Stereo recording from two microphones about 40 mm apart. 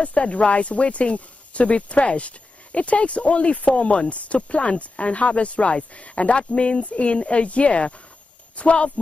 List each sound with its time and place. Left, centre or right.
0.0 s speech: left
3.7 s speech: left